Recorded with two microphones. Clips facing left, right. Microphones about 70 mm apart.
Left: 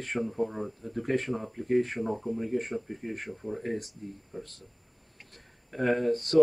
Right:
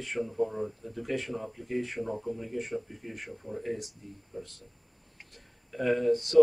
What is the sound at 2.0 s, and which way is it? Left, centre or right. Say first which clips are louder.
Speech: left 3 dB; left.